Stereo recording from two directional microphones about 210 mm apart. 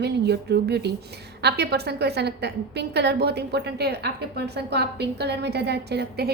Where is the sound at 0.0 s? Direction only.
55° right (ahead or behind).